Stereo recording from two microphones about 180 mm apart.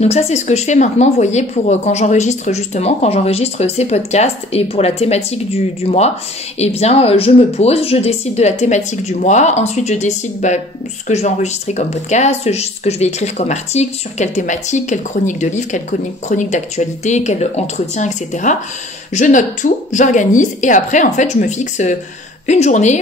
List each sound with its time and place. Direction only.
0.0 s a woman's voice: 35° left (ahead or behind)